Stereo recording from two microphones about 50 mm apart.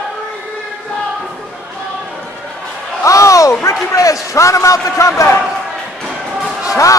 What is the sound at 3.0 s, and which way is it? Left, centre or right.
Speech, left.